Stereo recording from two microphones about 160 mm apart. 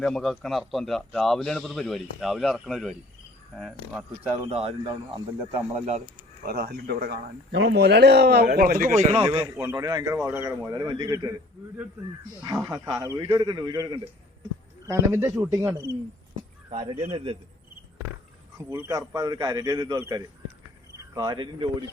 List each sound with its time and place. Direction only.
0.0 s a man's voice: centre (ahead or behind)
4.4 s a man's voice: 40° right (ahead or behind)
5.7 s speech: 45° right (ahead or behind)
6.4 s speech: 70° right (ahead or behind); by 9.4 s 35° right (ahead or behind)
9.4 s a man's voice: 20° right (ahead or behind)
12.4 s a man's voice: 20° right (ahead or behind)
16.6 s a man's voice: 30° right (ahead or behind)
18.5 s a man's voice: 20° right (ahead or behind)